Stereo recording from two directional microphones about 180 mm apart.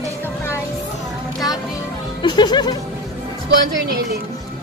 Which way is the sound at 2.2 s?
25° left (ahead or behind).